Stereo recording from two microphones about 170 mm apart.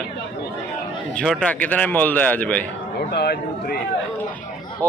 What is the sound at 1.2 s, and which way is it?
A man's voice, 5° left (ahead or behind).